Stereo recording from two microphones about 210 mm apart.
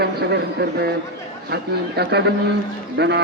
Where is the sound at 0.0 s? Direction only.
50° right (ahead or behind).